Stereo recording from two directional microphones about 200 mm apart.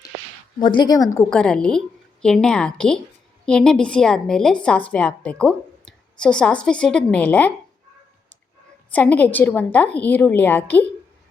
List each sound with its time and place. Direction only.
0.6 s a woman's voice: 25° left (ahead or behind)
1.3 s a woman's voice: 5° left (ahead or behind)
8.9 s a woman's voice: 10° left (ahead or behind)